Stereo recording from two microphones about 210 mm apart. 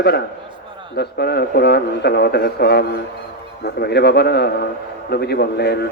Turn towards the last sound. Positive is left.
turn(degrees=50)  # may be behind; listen again after turning